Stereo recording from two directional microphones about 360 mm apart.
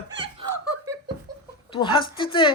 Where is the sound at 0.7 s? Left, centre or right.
Centre.